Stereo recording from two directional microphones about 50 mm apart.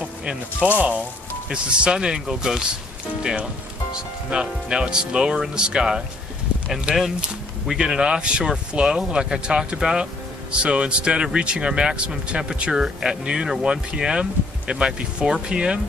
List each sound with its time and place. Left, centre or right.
0.6 s speech: right
1.5 s speech: centre
3.9 s speech: centre